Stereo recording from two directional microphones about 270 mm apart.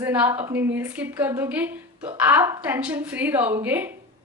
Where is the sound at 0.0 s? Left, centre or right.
Centre.